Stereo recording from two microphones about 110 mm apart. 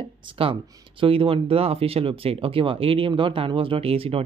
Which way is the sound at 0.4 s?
55° right (ahead or behind).